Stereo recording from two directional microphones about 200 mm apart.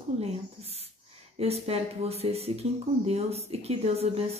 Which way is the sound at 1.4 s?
30° right (ahead or behind).